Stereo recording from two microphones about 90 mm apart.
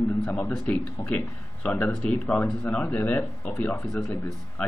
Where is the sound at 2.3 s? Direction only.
15° left (ahead or behind).